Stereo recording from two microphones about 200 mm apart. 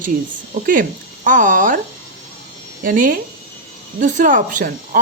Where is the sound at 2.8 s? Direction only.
45° right (ahead or behind).